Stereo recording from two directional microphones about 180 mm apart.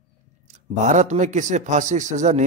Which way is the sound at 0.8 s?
40° right (ahead or behind).